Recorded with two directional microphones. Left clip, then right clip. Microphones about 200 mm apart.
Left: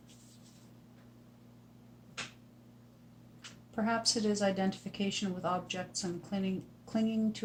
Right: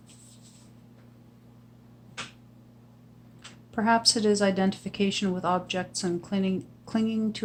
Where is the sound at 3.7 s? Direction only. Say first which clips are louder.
Right 9 dB; 40° right (ahead or behind).